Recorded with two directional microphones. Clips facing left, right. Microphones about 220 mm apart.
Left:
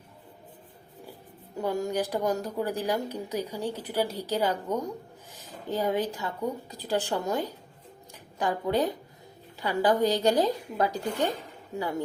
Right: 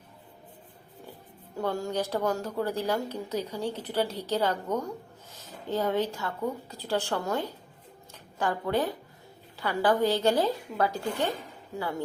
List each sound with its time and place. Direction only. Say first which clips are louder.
1.5 s a woman's voice: left 1 dB; 20° left (ahead or behind)